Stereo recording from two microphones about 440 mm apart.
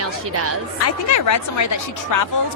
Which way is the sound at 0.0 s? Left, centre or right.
Right.